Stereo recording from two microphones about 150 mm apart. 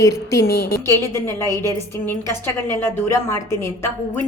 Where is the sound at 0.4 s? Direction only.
90° left.